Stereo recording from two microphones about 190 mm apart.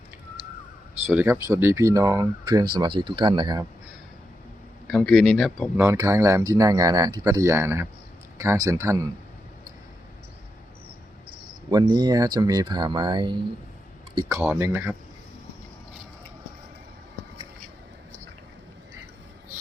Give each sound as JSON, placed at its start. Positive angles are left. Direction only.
{"t": 1.0, "sound": "speech", "side_deg": -10}
{"t": 4.9, "sound": "speech", "side_deg": 5}
{"t": 5.7, "sound": "speech", "side_deg": -15}
{"t": 11.7, "sound": "speech", "side_deg": -20}